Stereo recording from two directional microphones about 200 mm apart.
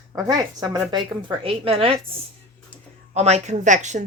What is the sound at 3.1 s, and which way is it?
Speech, 35° right (ahead or behind).